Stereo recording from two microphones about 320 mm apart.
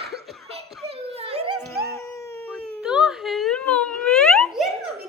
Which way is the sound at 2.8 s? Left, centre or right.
Centre.